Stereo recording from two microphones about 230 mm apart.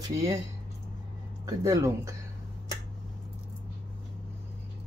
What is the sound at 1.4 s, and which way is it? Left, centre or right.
Speech, centre.